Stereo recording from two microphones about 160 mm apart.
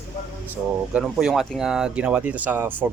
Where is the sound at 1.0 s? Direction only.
5° right (ahead or behind).